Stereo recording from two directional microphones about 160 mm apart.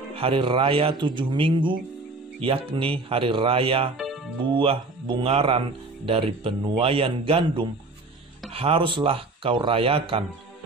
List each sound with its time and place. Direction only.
0.1 s speech: 35° right (ahead or behind)